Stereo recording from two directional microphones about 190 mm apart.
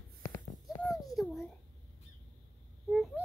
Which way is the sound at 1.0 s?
Centre (ahead or behind).